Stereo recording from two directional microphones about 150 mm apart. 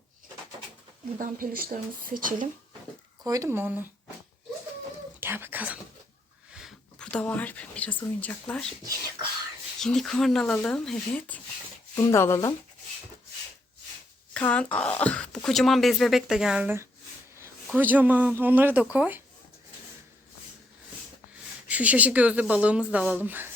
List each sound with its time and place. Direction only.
1.2 s speech: 70° right (ahead or behind)
3.2 s speech: 25° right (ahead or behind)
5.2 s whispering: 15° right (ahead or behind)
6.5 s speech: centre (ahead or behind)
9.8 s speech: 5° left (ahead or behind)
12.1 s speech: 15° left (ahead or behind)
14.3 s speech: 5° left (ahead or behind)
16.6 s speech: 15° right (ahead or behind)
21.7 s speech: 10° right (ahead or behind)